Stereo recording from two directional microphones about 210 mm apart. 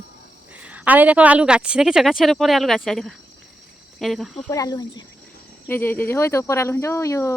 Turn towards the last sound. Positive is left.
turn(degrees=15)  # may be behind; listen again after turning